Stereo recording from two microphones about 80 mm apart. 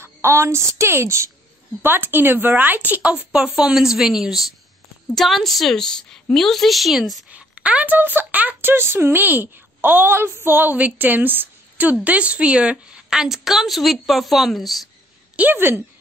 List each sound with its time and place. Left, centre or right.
0.0 s a woman's voice: right; by 3.2 s centre
3.7 s a woman's voice: centre
7.2 s speech: centre
15.3 s speech: right